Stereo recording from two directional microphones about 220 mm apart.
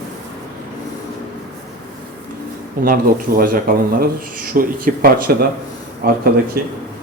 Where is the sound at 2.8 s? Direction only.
40° right (ahead or behind).